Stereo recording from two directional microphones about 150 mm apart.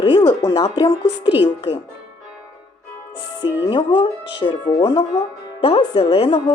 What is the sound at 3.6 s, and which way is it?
Speech, 30° left (ahead or behind).